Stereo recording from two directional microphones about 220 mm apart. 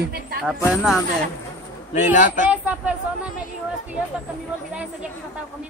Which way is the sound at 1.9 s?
35° left (ahead or behind).